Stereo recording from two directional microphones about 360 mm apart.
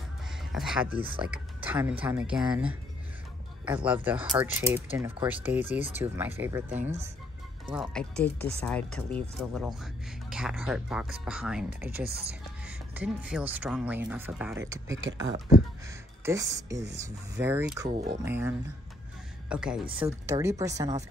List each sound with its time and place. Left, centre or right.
0.4 s speech: centre
6.7 s speech: centre
7.7 s speech: centre
11.9 s speech: right
12.6 s speech: centre
19.5 s speech: centre